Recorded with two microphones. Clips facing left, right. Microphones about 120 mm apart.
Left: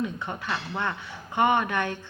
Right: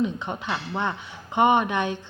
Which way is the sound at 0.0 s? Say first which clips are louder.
Right 4 dB; 20° right (ahead or behind).